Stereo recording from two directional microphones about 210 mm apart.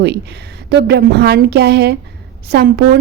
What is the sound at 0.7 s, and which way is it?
A woman's voice, 50° right (ahead or behind).